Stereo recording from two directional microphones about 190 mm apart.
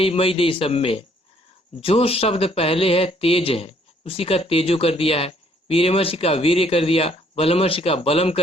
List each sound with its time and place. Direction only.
0.0 s speech: 30° left (ahead or behind)